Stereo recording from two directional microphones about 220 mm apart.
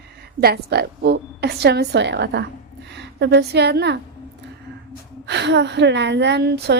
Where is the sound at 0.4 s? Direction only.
45° right (ahead or behind).